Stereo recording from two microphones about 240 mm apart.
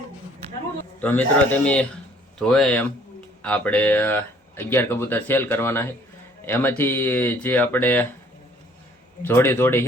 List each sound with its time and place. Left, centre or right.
1.0 s speech: centre
9.2 s speech: centre